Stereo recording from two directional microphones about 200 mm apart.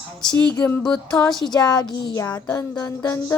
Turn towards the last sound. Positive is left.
turn(degrees=15)  # may be behind; listen again after turning